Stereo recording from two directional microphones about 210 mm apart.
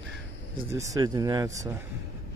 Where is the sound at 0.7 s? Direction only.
15° right (ahead or behind).